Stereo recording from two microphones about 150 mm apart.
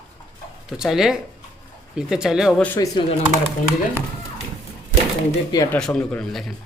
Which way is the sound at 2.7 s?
25° left (ahead or behind).